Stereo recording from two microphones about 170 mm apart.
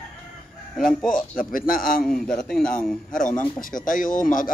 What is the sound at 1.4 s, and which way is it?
Speech, 55° left (ahead or behind).